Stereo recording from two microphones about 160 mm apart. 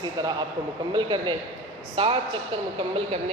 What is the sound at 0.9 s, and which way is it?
Speech, 30° right (ahead or behind).